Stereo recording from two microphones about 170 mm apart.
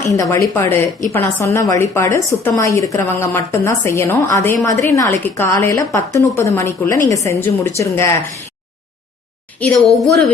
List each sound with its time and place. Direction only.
0.1 s a woman's voice: 20° left (ahead or behind)
9.6 s a woman's voice: 5° left (ahead or behind)